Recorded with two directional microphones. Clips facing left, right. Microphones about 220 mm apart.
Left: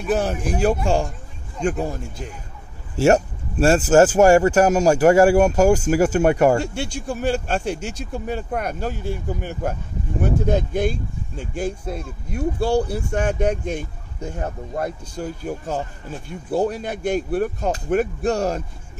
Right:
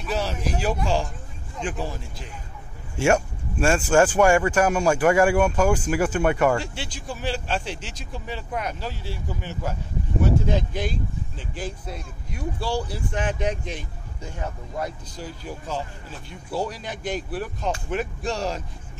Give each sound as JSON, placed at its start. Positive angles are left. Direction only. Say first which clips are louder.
{"t": 0.0, "sound": "speech", "louder": "left 6 dB", "side_deg": 50}